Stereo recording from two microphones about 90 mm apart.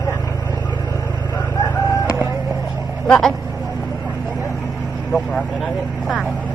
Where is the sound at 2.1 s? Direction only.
30° right (ahead or behind).